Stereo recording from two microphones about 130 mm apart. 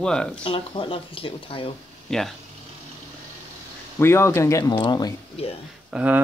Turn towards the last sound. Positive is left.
turn(degrees=-10)  # may be behind; listen again after turning